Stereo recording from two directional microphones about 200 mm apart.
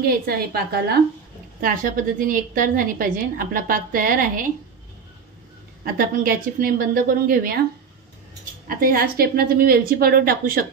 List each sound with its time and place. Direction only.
0.0 s a woman's voice: 50° right (ahead or behind)
5.9 s a woman's voice: 45° right (ahead or behind)
8.6 s a woman's voice: 45° right (ahead or behind)